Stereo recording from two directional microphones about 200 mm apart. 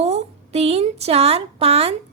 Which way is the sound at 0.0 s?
35° right (ahead or behind).